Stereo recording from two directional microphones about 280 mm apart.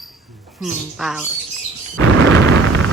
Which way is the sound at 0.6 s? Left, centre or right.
Centre.